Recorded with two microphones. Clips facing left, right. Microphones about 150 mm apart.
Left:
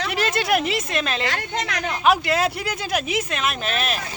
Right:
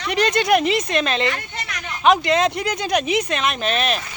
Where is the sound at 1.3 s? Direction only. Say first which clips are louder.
Left 2 dB; 90° left.